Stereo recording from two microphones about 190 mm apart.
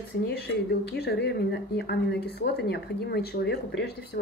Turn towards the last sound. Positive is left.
turn(degrees=55)  # may be behind; listen again after turning